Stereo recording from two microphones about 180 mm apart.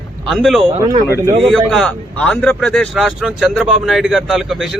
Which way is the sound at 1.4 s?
Centre (ahead or behind).